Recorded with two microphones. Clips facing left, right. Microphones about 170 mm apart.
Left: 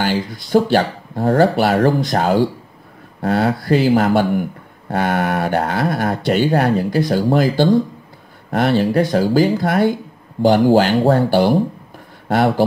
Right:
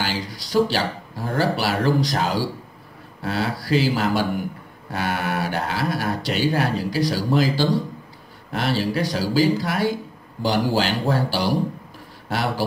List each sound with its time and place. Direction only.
0.0 s speech: 55° left (ahead or behind)